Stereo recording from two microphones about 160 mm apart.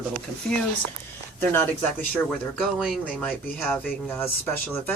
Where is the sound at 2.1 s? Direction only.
5° left (ahead or behind).